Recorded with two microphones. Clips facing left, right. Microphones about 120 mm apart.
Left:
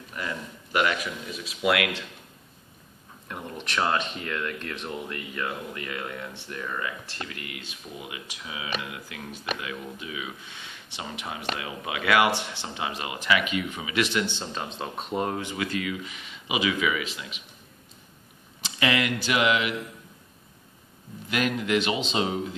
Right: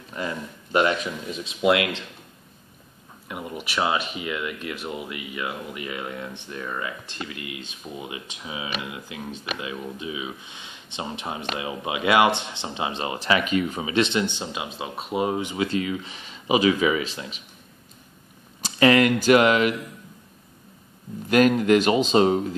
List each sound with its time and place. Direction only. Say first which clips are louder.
0.1 s speech: right 4 dB; 25° right (ahead or behind)
3.3 s speech: right 3 dB; 10° right (ahead or behind); by 17.4 s 35° right (ahead or behind)
18.6 s speech: right 8 dB; 40° right (ahead or behind)
21.3 s speech: right 8 dB; 40° right (ahead or behind)